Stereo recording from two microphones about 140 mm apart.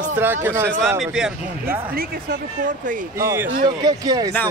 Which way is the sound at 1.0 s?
5° right (ahead or behind).